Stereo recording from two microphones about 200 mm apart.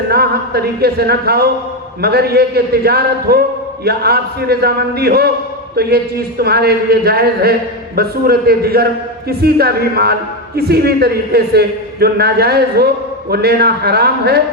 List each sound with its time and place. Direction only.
0.1 s a man's voice: 50° right (ahead or behind)